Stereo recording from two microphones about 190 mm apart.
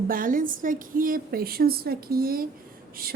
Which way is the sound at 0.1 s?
45° right (ahead or behind).